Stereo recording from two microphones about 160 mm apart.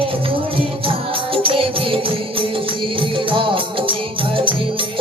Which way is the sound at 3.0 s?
30° right (ahead or behind).